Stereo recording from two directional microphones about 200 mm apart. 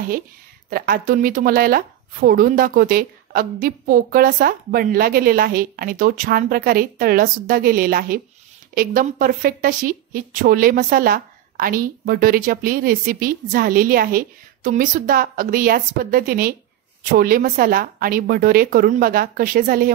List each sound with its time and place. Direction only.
0.7 s a woman's voice: 50° right (ahead or behind)